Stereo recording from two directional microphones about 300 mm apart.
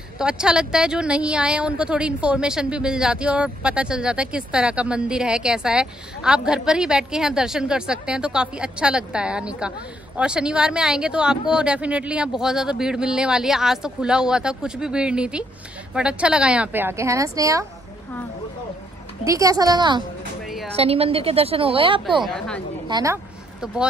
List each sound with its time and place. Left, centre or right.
0.2 s a woman's voice: centre
19.2 s a woman's voice: centre
22.2 s a woman's voice: centre
22.8 s speech: centre